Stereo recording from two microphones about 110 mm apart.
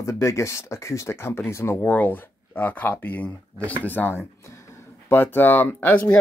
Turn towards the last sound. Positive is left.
turn(degrees=15)  # may be behind; listen again after turning